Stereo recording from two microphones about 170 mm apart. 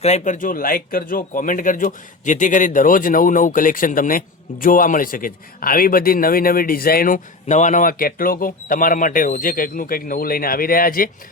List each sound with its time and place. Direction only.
0.0 s a man's voice: 45° left (ahead or behind)